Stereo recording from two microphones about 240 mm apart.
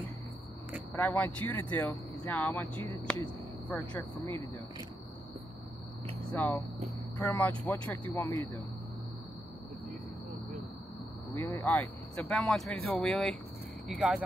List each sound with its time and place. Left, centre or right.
0.9 s speech: centre
4.2 s speech: centre
6.3 s speech: centre
11.3 s speech: centre